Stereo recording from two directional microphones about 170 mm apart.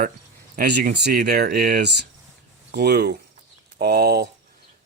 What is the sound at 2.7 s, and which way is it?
Speech, 75° right (ahead or behind).